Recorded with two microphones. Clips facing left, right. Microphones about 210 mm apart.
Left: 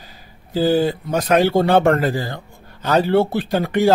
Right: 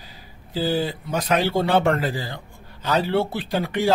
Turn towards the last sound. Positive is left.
turn(degrees=45)  # may be behind; listen again after turning